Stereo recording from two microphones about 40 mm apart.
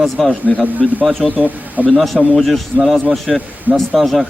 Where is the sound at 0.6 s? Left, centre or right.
Right.